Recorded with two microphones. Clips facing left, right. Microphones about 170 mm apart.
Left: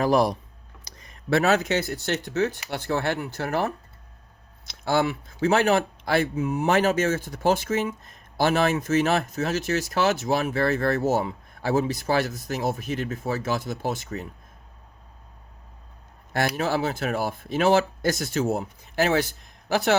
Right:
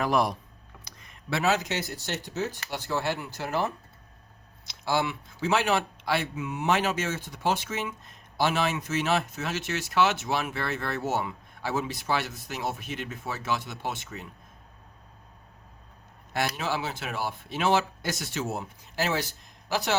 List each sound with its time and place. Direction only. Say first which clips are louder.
0.0 s speech: left 5 dB; 35° left (ahead or behind); by 3.7 s 55° left (ahead or behind)
4.9 s speech: left 4 dB; 50° left (ahead or behind)
16.6 s speech: left 6 dB; 45° left (ahead or behind)